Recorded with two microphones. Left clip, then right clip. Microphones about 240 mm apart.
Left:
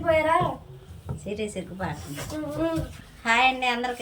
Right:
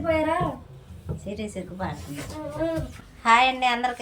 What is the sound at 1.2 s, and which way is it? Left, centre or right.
Speech, centre.